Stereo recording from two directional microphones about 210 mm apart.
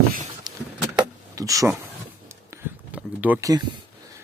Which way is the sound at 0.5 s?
20° right (ahead or behind).